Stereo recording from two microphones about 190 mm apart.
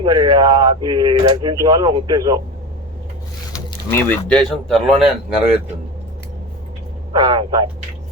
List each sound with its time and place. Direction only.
0.0 s speech: 25° right (ahead or behind)
3.5 s speech: 15° left (ahead or behind); by 5.1 s centre (ahead or behind)
7.1 s speech: 20° right (ahead or behind)